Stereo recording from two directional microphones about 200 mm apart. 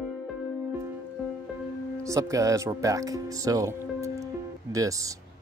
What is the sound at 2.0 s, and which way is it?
Speech, 15° right (ahead or behind).